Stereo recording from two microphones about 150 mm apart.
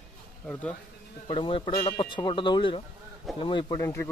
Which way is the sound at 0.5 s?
5° left (ahead or behind).